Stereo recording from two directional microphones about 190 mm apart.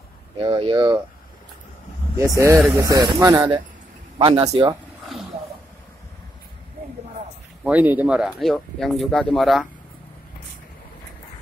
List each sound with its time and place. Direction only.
0.4 s speech: 25° right (ahead or behind)
2.1 s speech: 15° right (ahead or behind)
4.2 s speech: 30° right (ahead or behind)
7.6 s speech: 10° right (ahead or behind)